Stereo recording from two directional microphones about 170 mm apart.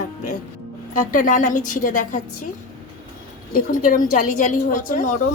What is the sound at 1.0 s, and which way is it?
A woman's voice, 50° left (ahead or behind).